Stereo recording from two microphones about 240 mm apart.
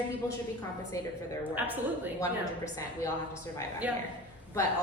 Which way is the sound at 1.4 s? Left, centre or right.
Centre.